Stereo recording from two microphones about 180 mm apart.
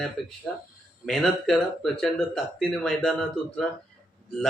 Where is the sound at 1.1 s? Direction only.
Centre (ahead or behind).